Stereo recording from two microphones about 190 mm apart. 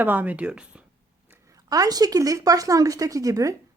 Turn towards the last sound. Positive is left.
turn(degrees=-15)  # may be behind; listen again after turning